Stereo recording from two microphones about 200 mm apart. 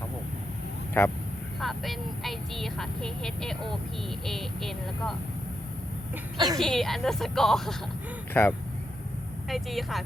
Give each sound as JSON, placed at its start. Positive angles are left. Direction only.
{"t": 0.9, "sound": "speech", "side_deg": 10}
{"t": 1.5, "sound": "speech", "side_deg": 0}
{"t": 6.3, "sound": "a woman's voice", "side_deg": -20}
{"t": 6.6, "sound": "speech", "side_deg": 0}
{"t": 9.5, "sound": "speech", "side_deg": 0}